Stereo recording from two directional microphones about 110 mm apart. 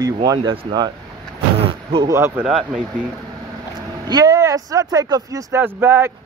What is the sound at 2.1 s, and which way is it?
Speech, 20° right (ahead or behind).